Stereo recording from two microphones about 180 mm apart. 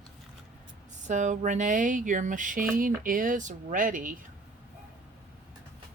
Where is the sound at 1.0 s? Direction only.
45° right (ahead or behind).